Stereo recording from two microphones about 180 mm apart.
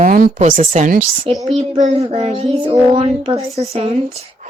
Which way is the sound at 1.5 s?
40° right (ahead or behind).